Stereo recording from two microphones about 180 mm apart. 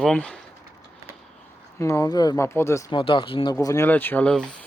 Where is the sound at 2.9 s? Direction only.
30° left (ahead or behind); by 4.4 s 5° left (ahead or behind).